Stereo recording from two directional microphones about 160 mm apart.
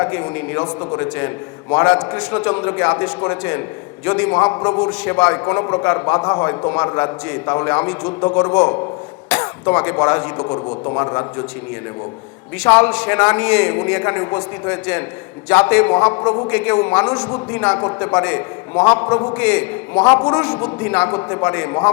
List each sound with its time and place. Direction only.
0.0 s a man's voice: 15° left (ahead or behind)
10.4 s a man's voice: 25° left (ahead or behind)
12.7 s a man's voice: 10° left (ahead or behind)
16.5 s a man's voice: 10° left (ahead or behind)
20.1 s a man's voice: 25° left (ahead or behind)
20.3 s a man's voice: 10° left (ahead or behind)